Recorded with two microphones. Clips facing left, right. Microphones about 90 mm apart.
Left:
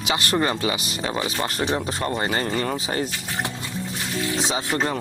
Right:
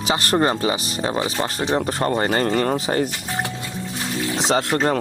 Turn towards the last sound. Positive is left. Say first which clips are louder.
# right 4 dB
turn(degrees=-45)  # may be behind; listen again after turning